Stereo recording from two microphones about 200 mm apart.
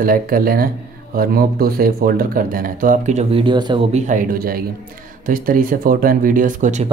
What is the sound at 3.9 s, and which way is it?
Speech, 40° right (ahead or behind).